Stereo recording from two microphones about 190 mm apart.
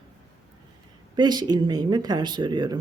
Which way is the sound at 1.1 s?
20° right (ahead or behind).